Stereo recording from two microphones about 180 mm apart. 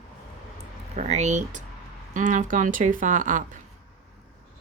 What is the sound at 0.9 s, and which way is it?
Speech, 40° right (ahead or behind).